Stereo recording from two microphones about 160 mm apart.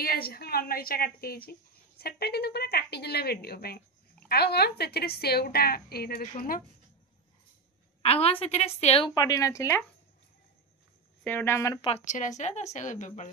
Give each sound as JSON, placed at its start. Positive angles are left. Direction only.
{"t": 0.0, "sound": "speech", "side_deg": 70}
{"t": 4.3, "sound": "speech", "side_deg": 90}
{"t": 8.0, "sound": "a woman's voice", "side_deg": 40}
{"t": 9.1, "sound": "speech", "side_deg": 20}
{"t": 11.2, "sound": "speech", "side_deg": 15}
{"t": 11.9, "sound": "a woman's voice", "side_deg": 50}